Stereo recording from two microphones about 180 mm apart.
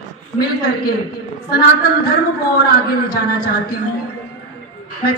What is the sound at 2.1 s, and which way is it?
A man's voice, 55° left (ahead or behind).